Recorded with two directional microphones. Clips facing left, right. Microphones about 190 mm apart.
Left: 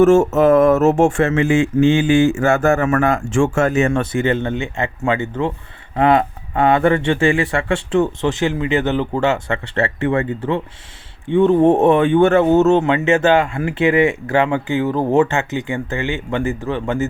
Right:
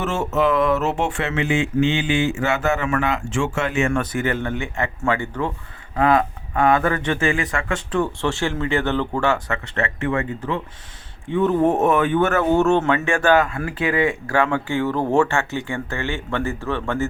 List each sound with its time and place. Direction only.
0.0 s mantra: 45° left (ahead or behind)
3.9 s speech: 25° left (ahead or behind)